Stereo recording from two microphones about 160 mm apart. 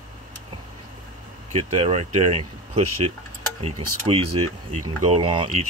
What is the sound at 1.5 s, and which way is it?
Speech, 40° right (ahead or behind).